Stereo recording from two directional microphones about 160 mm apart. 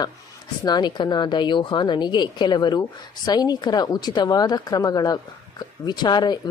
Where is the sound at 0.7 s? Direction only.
25° left (ahead or behind).